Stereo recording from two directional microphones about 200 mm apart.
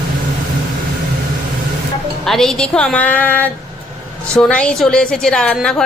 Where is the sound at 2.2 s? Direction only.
Centre (ahead or behind).